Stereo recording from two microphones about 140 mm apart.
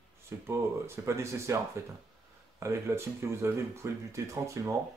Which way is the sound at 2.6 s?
20° right (ahead or behind).